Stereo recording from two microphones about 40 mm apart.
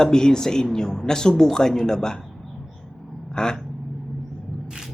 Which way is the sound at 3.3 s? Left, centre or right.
Centre.